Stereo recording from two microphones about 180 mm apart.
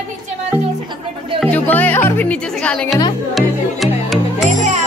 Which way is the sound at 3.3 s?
Centre (ahead or behind).